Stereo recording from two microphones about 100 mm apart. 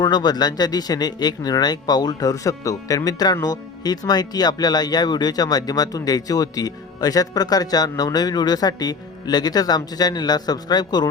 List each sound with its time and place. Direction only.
0.0 s speech: 45° left (ahead or behind)